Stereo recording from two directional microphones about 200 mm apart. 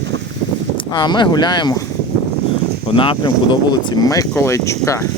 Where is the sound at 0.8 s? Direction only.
20° left (ahead or behind).